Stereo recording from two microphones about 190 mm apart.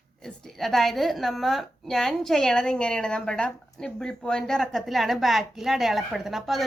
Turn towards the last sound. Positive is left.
turn(degrees=0)  # may be behind; listen again after turning